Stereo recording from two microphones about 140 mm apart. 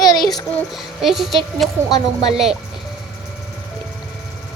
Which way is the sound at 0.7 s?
Centre (ahead or behind).